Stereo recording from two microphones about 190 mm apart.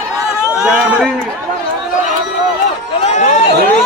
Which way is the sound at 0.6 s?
5° right (ahead or behind).